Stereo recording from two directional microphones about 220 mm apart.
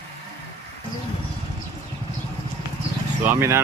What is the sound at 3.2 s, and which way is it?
Speech, 10° right (ahead or behind).